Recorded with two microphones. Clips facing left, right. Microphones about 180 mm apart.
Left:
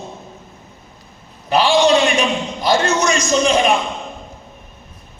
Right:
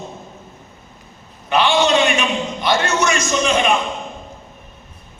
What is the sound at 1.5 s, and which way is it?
A man's voice, 35° left (ahead or behind).